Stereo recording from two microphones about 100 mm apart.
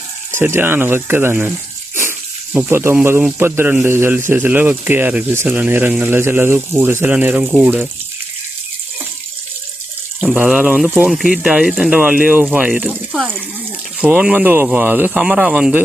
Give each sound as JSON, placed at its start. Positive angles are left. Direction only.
{"t": 0.3, "sound": "speech", "side_deg": -25}
{"t": 2.0, "sound": "snake", "side_deg": -20}
{"t": 3.3, "sound": "speech", "side_deg": -25}
{"t": 10.3, "sound": "speech", "side_deg": -15}